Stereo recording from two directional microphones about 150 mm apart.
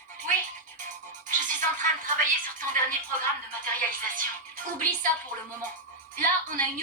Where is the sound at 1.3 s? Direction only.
60° right (ahead or behind).